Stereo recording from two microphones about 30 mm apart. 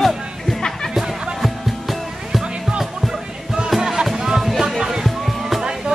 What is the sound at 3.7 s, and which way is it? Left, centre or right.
Music, centre.